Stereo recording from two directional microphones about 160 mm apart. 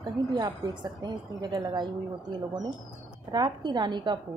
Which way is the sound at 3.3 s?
25° right (ahead or behind).